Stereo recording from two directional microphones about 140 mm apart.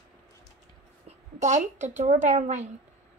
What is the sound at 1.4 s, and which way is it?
A woman's voice, 55° right (ahead or behind).